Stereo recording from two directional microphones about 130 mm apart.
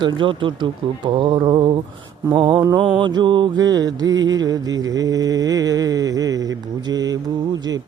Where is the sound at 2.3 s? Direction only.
35° right (ahead or behind).